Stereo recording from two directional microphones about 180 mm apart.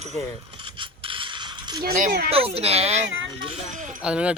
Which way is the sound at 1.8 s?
50° right (ahead or behind).